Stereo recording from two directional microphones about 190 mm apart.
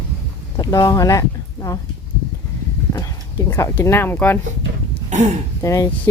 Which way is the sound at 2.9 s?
15° left (ahead or behind).